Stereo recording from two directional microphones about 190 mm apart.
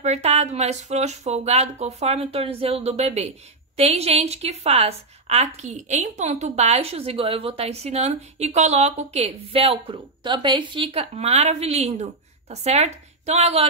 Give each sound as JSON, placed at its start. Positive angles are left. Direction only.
{"t": 0.0, "sound": "a woman's voice", "side_deg": -35}